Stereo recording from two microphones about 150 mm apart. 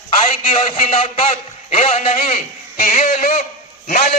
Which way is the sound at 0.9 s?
35° left (ahead or behind).